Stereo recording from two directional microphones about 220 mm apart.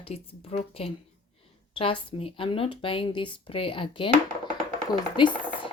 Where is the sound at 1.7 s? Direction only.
25° left (ahead or behind).